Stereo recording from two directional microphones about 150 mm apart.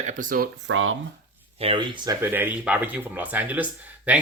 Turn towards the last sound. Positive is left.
turn(degrees=-10)  # may be behind; listen again after turning